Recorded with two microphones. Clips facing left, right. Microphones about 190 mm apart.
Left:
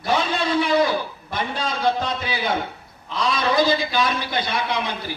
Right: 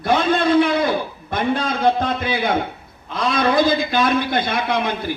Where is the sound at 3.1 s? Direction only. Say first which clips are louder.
Right 3 dB; 55° right (ahead or behind).